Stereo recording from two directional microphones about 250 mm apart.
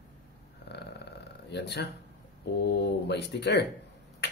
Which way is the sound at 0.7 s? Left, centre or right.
Left.